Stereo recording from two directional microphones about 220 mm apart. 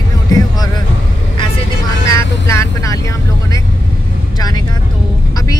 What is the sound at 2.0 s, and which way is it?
Speech, 15° left (ahead or behind).